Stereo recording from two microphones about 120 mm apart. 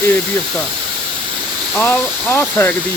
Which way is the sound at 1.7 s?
10° left (ahead or behind).